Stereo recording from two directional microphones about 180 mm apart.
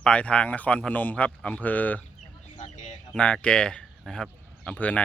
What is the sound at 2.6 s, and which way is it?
Bird, 45° left (ahead or behind).